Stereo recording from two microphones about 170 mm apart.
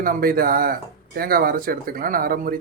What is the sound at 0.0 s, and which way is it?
Speech, 55° right (ahead or behind).